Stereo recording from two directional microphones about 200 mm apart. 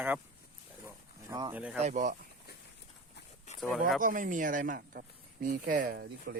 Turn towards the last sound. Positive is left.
turn(degrees=-50)  # may be behind; listen again after turning